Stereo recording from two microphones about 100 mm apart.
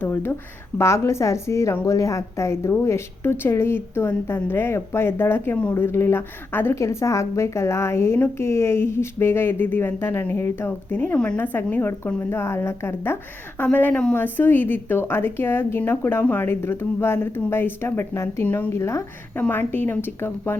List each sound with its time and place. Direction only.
0.0 s a woman's voice: 25° left (ahead or behind)